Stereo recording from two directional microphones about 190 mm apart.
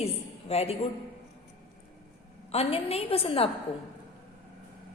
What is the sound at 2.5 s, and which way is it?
A woman's voice, 30° left (ahead or behind).